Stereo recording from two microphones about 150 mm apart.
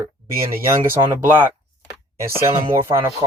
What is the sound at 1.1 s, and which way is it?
Speech, 15° right (ahead or behind).